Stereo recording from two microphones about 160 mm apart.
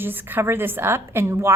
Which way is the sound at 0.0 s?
10° right (ahead or behind).